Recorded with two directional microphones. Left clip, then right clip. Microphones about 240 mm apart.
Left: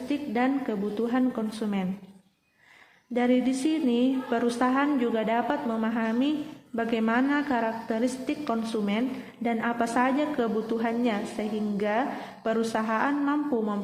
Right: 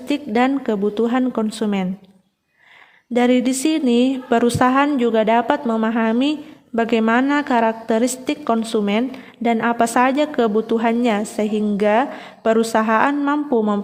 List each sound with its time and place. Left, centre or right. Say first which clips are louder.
0.1 s a woman's voice: right 9 dB; right
3.1 s a woman's voice: right 8 dB; right